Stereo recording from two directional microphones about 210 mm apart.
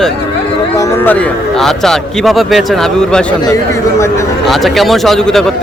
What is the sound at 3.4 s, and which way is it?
Speech, 15° left (ahead or behind).